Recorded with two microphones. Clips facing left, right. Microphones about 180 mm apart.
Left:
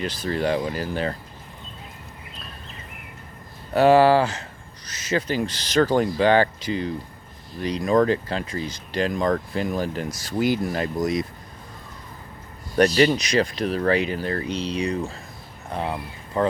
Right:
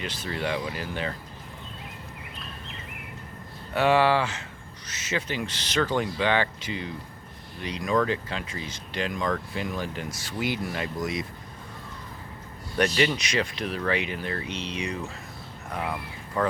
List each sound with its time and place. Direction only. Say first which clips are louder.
0.0 s speech: left 6 dB; 40° left (ahead or behind)
3.7 s speech: left 6 dB; 40° left (ahead or behind)
12.7 s speech: left 6 dB; 40° left (ahead or behind)